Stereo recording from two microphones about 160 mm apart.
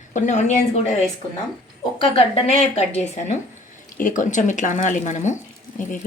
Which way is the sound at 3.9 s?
55° left (ahead or behind).